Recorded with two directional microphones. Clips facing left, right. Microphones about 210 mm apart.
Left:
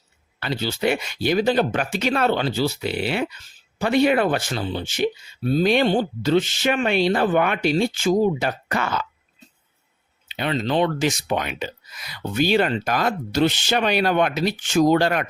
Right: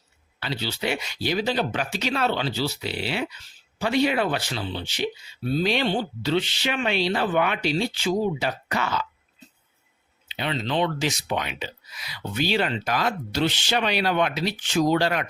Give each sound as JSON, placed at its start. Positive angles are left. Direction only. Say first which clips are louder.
{"t": 0.3, "sound": "speech", "louder": "left 4 dB", "side_deg": 50}
{"t": 10.2, "sound": "speech", "louder": "left 4 dB", "side_deg": 50}